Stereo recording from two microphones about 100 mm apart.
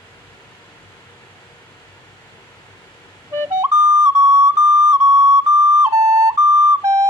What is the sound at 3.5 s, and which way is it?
Flute, 30° right (ahead or behind).